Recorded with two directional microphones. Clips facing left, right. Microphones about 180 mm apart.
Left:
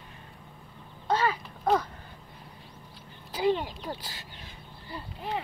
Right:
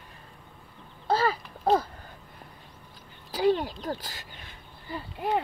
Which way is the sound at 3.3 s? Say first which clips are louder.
Right 2 dB; 40° right (ahead or behind).